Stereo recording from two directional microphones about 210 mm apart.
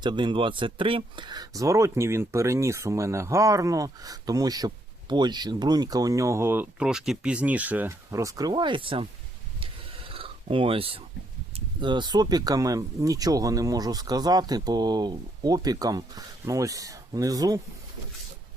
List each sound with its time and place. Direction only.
0.0 s speech: 20° right (ahead or behind)
9.6 s a sound: 25° right (ahead or behind)
11.5 s speech: 20° right (ahead or behind)